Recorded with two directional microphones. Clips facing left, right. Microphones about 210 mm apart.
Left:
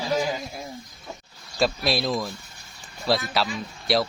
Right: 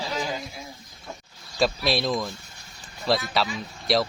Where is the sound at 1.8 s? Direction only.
Centre (ahead or behind).